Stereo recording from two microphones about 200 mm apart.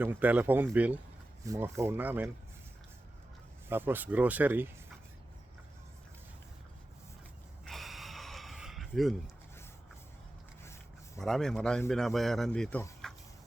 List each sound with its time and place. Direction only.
0.0 s speech: 10° right (ahead or behind)
3.7 s speech: 10° right (ahead or behind)
7.6 s snort: centre (ahead or behind)
10.6 s a sound: 15° left (ahead or behind)
11.2 s a man's voice: centre (ahead or behind)
13.0 s a sound: 5° left (ahead or behind)